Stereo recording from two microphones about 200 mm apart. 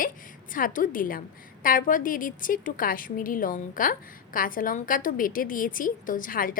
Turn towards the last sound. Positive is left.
turn(degrees=45)  # may be behind; listen again after turning